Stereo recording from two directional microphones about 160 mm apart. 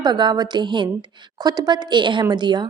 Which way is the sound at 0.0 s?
25° right (ahead or behind).